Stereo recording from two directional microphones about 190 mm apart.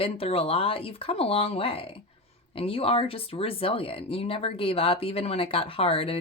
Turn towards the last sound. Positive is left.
turn(degrees=30)  # may be behind; listen again after turning